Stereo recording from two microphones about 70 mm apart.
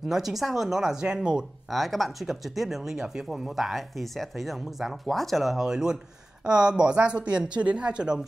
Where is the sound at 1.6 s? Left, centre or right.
Centre.